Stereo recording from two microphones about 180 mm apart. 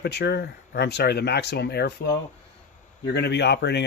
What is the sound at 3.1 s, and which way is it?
Speech, 70° left (ahead or behind).